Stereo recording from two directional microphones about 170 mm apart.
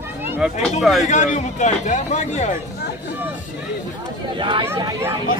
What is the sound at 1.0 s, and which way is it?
Speech, 45° left (ahead or behind).